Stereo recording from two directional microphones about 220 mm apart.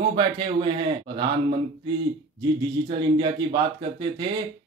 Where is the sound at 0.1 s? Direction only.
25° right (ahead or behind).